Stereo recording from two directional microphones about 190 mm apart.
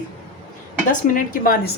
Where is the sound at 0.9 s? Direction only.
45° left (ahead or behind).